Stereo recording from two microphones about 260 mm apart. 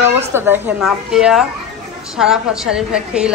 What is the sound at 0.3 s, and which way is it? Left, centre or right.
A woman's voice, centre.